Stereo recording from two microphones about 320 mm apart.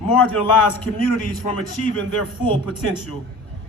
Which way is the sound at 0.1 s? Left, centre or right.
Left.